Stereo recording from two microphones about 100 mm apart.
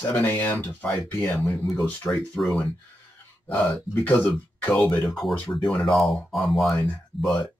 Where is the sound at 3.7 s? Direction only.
15° left (ahead or behind).